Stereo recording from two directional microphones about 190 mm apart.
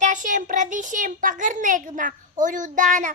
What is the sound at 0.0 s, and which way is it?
A child's voice, 40° right (ahead or behind).